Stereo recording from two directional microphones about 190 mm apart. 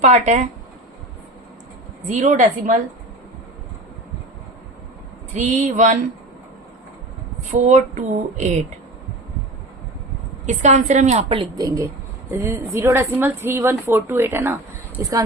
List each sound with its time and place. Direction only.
0.0 s a woman's voice: 40° right (ahead or behind)
2.0 s a woman's voice: 40° right (ahead or behind)
5.3 s a woman's voice: 40° right (ahead or behind)
7.5 s a woman's voice: 40° right (ahead or behind)
10.4 s a woman's voice: 35° right (ahead or behind); by 15.2 s 15° right (ahead or behind)